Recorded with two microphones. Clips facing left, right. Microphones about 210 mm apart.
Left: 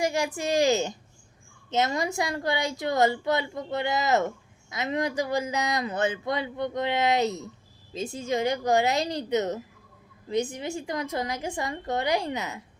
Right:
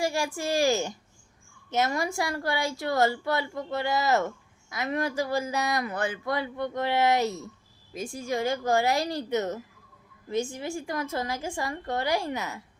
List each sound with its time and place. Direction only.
0.0 s speech: 20° left (ahead or behind)